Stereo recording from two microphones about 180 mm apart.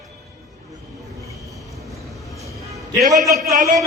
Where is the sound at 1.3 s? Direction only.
Centre (ahead or behind).